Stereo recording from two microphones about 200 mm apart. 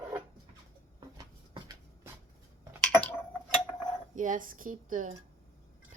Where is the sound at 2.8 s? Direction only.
5° left (ahead or behind).